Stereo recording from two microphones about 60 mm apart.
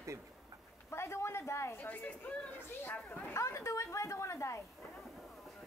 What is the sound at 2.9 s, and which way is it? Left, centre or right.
Speech, left.